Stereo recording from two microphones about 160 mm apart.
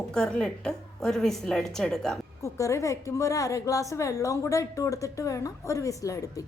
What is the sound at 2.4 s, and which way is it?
A woman's voice, 20° left (ahead or behind).